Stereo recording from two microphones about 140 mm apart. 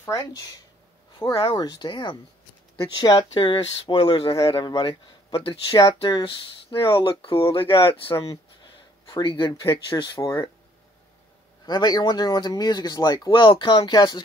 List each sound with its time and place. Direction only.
0.0 s speech: 25° left (ahead or behind)
5.5 s speech: 25° left (ahead or behind)
11.6 s speech: 30° left (ahead or behind)